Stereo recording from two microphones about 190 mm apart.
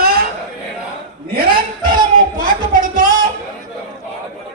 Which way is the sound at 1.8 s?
25° right (ahead or behind).